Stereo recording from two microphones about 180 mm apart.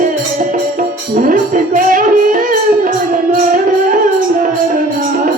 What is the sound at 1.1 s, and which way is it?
Music, 50° right (ahead or behind).